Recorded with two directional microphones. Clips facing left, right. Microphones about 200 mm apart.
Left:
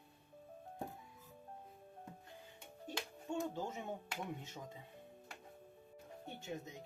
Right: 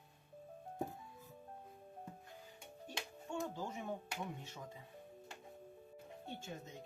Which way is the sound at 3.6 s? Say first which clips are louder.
Left 1 dB; 20° left (ahead or behind).